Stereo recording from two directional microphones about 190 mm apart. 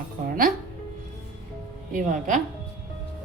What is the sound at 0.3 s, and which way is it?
Music, 45° right (ahead or behind).